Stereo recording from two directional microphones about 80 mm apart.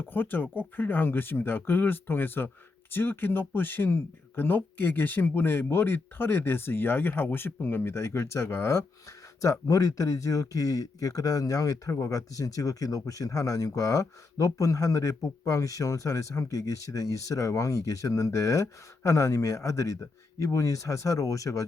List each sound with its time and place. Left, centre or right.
0.0 s speech: left